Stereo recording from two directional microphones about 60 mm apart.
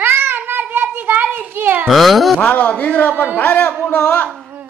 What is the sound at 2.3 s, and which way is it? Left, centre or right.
A woman's voice, left.